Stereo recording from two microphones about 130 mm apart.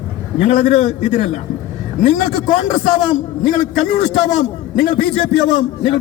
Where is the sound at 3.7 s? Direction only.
65° left (ahead or behind).